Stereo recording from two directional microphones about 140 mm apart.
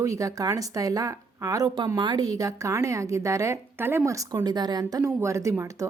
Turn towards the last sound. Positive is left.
turn(degrees=-20)  # may be behind; listen again after turning